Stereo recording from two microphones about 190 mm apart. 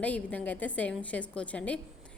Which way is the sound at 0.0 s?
5° left (ahead or behind).